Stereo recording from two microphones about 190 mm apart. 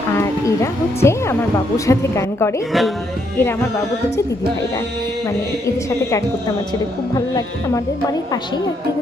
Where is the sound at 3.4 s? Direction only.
10° left (ahead or behind).